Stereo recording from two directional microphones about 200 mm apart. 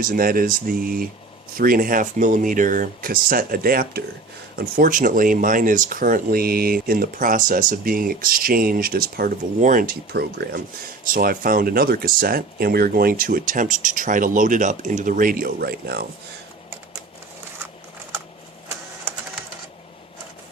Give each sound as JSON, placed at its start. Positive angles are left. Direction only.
{"t": 0.0, "sound": "speech", "side_deg": -45}